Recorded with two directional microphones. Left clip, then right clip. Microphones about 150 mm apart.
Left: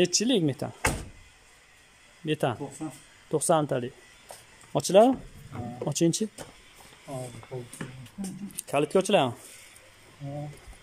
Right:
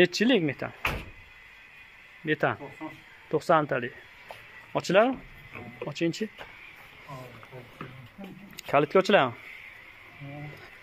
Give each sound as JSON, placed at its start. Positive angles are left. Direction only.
{"t": 0.0, "sound": "speech", "side_deg": 25}
{"t": 2.2, "sound": "speech", "side_deg": 20}
{"t": 8.2, "sound": "speech", "side_deg": 40}
{"t": 8.5, "sound": "speech", "side_deg": 15}